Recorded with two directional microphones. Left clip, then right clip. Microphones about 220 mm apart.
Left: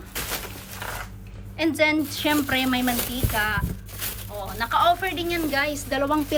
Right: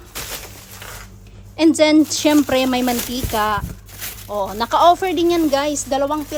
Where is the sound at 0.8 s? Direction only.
Centre (ahead or behind).